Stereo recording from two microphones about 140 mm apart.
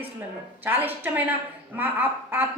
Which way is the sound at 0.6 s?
15° right (ahead or behind).